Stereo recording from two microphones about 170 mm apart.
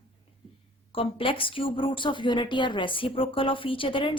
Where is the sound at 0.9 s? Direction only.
30° left (ahead or behind).